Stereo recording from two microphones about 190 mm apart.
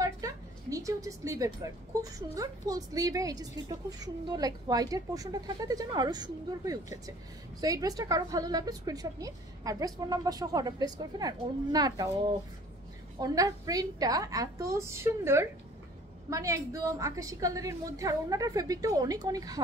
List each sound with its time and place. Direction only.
0.0 s a woman's voice: 15° right (ahead or behind)
13.2 s a woman's voice: 20° right (ahead or behind)